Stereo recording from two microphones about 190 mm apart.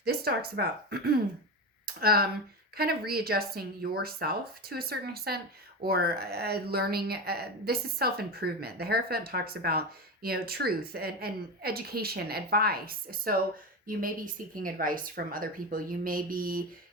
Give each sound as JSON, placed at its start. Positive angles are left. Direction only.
{"t": 0.0, "sound": "a woman's voice", "side_deg": -55}